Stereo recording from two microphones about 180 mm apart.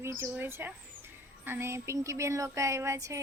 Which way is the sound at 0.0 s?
10° right (ahead or behind).